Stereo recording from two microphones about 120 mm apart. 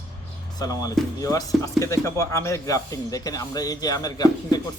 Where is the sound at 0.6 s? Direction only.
30° left (ahead or behind).